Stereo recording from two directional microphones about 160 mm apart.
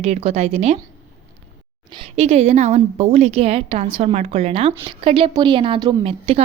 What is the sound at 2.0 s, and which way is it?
A woman's voice, 40° right (ahead or behind).